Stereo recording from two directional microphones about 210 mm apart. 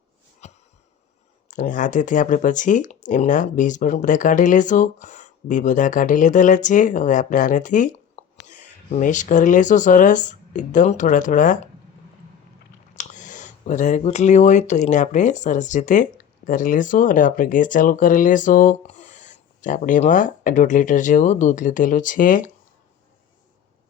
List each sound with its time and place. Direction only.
0.4 s a sound: 30° left (ahead or behind)
1.5 s speech: 35° left (ahead or behind)
12.9 s speech: 35° left (ahead or behind)